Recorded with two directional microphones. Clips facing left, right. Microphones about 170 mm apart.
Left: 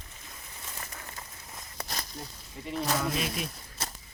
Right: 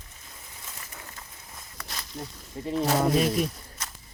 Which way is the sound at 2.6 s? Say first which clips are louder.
Right 6 dB; 35° right (ahead or behind).